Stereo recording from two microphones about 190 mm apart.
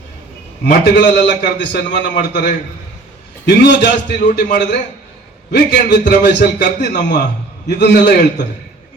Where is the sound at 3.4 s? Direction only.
65° left (ahead or behind).